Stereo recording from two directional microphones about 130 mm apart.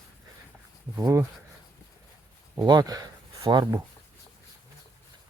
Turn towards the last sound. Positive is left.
turn(degrees=-30)  # may be behind; listen again after turning